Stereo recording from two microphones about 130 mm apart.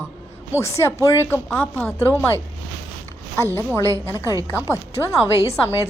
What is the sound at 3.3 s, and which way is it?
A woman's voice, 20° left (ahead or behind).